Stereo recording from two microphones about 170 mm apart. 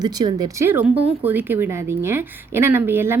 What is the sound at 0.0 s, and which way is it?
Speech, 25° right (ahead or behind).